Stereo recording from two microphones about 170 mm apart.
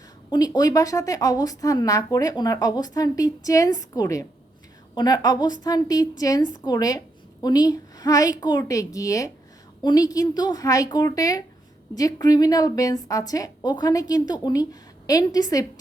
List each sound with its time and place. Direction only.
0.3 s a woman's voice: 25° left (ahead or behind)